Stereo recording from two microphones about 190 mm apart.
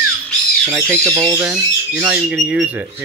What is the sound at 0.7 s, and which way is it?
Speech, 15° right (ahead or behind).